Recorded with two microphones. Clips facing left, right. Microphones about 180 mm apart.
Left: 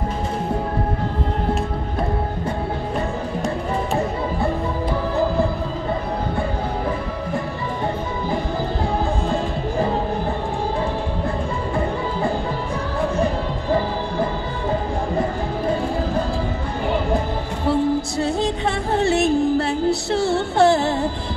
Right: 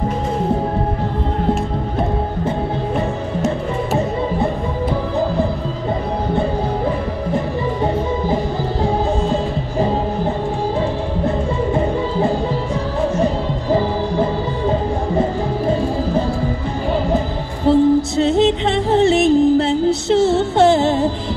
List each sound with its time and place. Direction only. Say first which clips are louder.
7.3 s music: right 7 dB; 20° right (ahead or behind)
11.2 s music: right 6 dB; 20° right (ahead or behind)
17.6 s music: right 7 dB; 20° right (ahead or behind)